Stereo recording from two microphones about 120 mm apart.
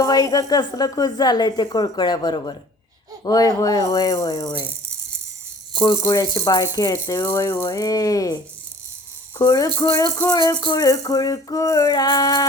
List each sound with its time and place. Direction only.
0.0 s a woman's voice: 30° left (ahead or behind)
5.8 s a woman's voice: 35° left (ahead or behind)
7.3 s speech: 20° left (ahead or behind)
9.4 s a woman's voice: 30° left (ahead or behind)